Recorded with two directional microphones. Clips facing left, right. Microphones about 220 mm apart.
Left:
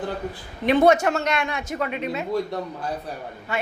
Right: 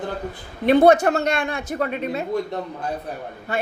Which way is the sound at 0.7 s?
35° right (ahead or behind).